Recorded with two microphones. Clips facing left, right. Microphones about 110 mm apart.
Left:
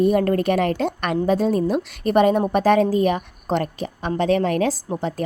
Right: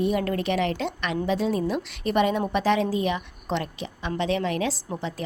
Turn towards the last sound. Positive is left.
turn(degrees=45)  # may be behind; listen again after turning